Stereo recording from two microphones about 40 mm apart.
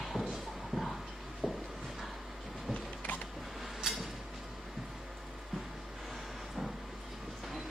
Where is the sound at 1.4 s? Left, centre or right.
Centre.